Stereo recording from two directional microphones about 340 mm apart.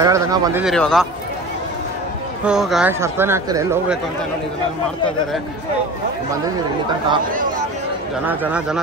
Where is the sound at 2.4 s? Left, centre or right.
Centre.